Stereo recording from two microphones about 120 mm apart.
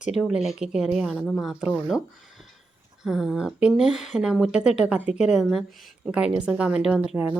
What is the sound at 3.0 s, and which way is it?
A woman's voice, 5° right (ahead or behind).